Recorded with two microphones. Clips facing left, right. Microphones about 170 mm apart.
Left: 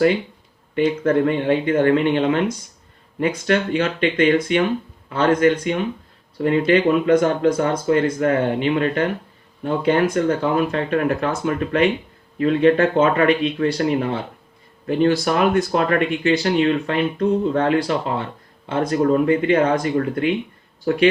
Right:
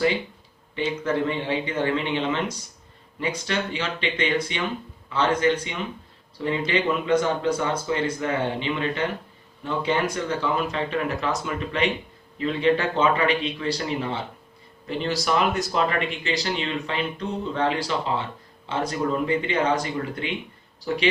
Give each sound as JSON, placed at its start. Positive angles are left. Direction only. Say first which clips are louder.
{"t": 1.0, "sound": "speech", "louder": "left 6 dB", "side_deg": 50}